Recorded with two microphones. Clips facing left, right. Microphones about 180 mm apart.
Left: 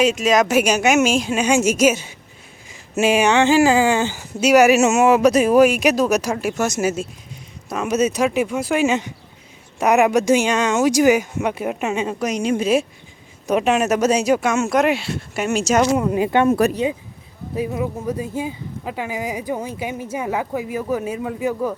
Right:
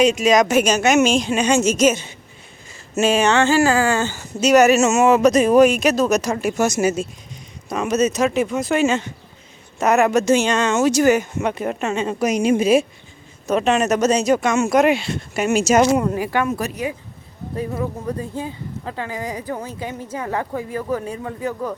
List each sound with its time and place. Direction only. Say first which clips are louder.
0.0 s speech: right 1 dB; 5° left (ahead or behind)
12.2 s speech: right 5 dB; 5° right (ahead or behind)
13.5 s speech: even; 10° left (ahead or behind)
16.1 s speech: left 4 dB; 20° left (ahead or behind)
16.5 s speech: left 8 dB; 55° left (ahead or behind)
17.5 s speech: left 2 dB; 10° left (ahead or behind)